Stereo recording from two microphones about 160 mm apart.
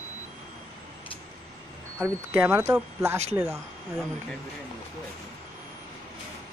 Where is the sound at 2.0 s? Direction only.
10° right (ahead or behind).